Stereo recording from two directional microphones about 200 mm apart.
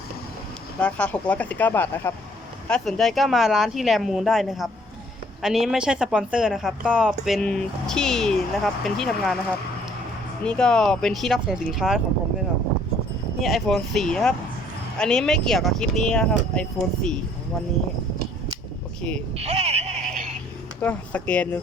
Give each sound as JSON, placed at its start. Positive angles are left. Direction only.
{"t": 0.8, "sound": "a woman's voice", "side_deg": 5}
{"t": 10.4, "sound": "a woman's voice", "side_deg": 5}
{"t": 13.4, "sound": "a woman's voice", "side_deg": 0}
{"t": 19.4, "sound": "a sound", "side_deg": -30}
{"t": 20.8, "sound": "speech", "side_deg": 5}